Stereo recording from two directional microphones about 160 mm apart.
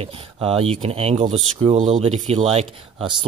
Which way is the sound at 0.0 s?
35° right (ahead or behind).